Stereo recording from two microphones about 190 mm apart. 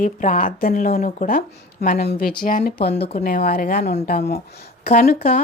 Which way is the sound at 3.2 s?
50° left (ahead or behind).